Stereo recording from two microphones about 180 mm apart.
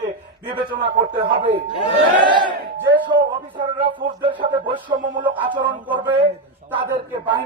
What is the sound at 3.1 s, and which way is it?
Speech, 25° right (ahead or behind).